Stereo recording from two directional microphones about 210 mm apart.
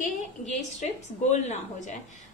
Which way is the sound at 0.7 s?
35° left (ahead or behind).